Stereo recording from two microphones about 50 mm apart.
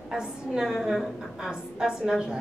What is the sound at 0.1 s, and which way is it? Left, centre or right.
A woman's voice, centre.